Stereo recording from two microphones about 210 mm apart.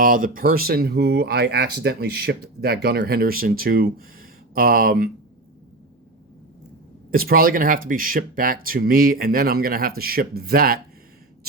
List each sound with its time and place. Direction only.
0.0 s speech: 40° right (ahead or behind)
7.1 s speech: 45° right (ahead or behind)